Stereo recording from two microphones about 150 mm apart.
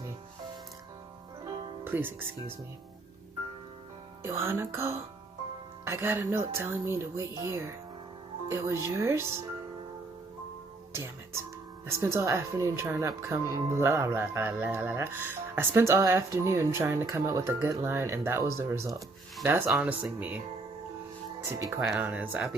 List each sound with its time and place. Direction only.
1.8 s speech: 15° right (ahead or behind)
4.2 s speech: 20° right (ahead or behind)
10.9 s speech: 15° right (ahead or behind)
18.9 s speech: centre (ahead or behind)
19.5 s speech: 15° right (ahead or behind)
21.8 s speech: 10° right (ahead or behind)